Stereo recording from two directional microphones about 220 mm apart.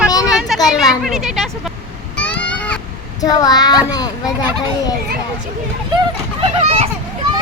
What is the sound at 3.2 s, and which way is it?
A child's voice, 15° left (ahead or behind).